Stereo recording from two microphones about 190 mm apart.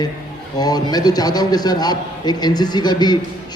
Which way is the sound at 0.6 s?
20° left (ahead or behind).